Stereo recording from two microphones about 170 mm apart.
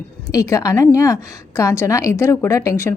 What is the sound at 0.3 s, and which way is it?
A woman's voice, 20° left (ahead or behind).